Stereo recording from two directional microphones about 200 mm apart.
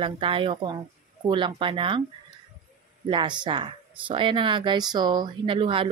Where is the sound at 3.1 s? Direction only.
25° right (ahead or behind).